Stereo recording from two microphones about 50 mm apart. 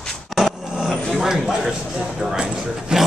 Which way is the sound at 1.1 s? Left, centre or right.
Centre.